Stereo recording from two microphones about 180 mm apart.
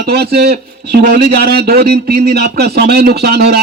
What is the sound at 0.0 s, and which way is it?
A man's voice, 65° right (ahead or behind).